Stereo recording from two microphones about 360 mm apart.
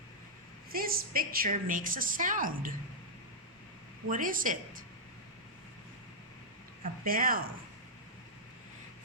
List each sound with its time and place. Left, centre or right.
0.7 s a woman's voice: right
4.1 s a woman's voice: right
7.0 s a woman's voice: right